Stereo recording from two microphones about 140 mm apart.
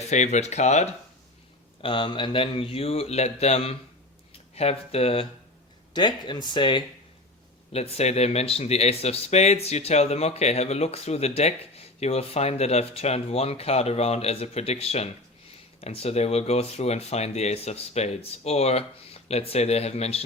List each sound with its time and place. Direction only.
0.1 s speech: 55° left (ahead or behind)
1.8 s speech: 35° left (ahead or behind)
5.9 s speech: 35° left (ahead or behind)
7.7 s speech: 50° left (ahead or behind)